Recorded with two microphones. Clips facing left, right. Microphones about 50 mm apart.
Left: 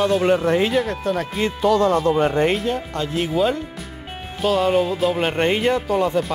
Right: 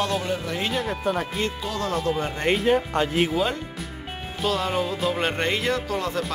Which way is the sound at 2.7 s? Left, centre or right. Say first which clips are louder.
Right 3 dB; right.